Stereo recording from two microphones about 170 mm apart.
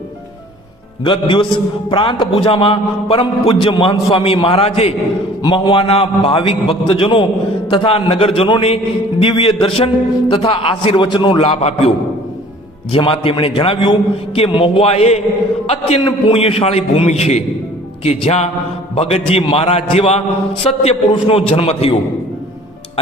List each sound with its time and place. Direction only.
1.0 s a man's voice: 30° left (ahead or behind)